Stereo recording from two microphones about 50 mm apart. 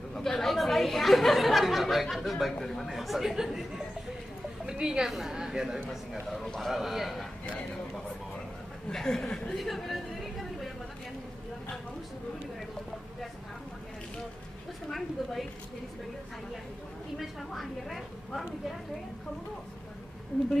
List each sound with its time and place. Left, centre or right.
0.1 s speech: centre
4.6 s a woman's voice: centre
6.4 s speech: centre
6.7 s speech: centre
8.9 s speech: centre
9.6 s chatter: centre
14.9 s speech: centre
17.2 s speech: centre